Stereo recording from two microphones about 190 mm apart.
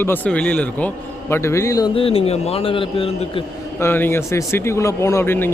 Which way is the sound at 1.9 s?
30° left (ahead or behind).